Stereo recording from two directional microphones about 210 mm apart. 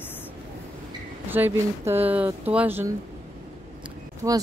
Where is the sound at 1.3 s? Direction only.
10° right (ahead or behind).